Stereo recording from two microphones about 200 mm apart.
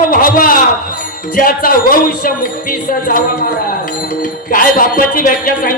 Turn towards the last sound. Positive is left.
turn(degrees=45)  # may be behind; listen again after turning